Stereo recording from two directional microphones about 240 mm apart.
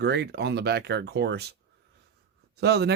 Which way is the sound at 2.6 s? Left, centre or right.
Right.